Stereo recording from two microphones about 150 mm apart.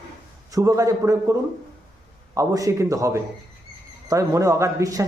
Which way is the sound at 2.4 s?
20° right (ahead or behind).